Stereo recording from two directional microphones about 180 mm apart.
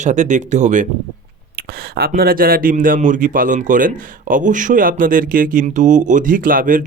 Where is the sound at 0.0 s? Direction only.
40° right (ahead or behind).